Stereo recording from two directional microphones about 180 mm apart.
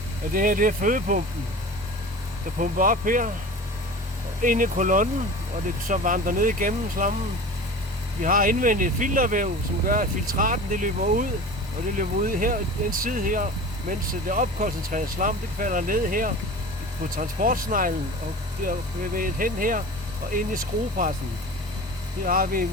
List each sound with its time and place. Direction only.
0.3 s speech: 50° right (ahead or behind)
2.6 s speech: 50° right (ahead or behind)
4.4 s speech: 50° right (ahead or behind)
8.2 s speech: 50° right (ahead or behind)
22.2 s speech: 50° right (ahead or behind)